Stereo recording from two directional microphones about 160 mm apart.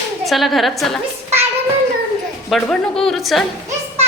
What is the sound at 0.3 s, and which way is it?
Speech, centre (ahead or behind).